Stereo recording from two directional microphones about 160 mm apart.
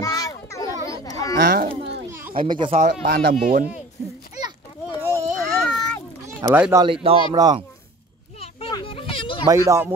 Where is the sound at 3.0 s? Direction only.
80° right.